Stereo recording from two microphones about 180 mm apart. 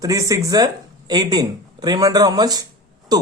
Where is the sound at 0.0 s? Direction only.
20° right (ahead or behind).